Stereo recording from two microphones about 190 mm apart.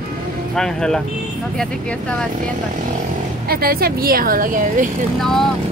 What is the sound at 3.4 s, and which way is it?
A woman's voice, 50° right (ahead or behind).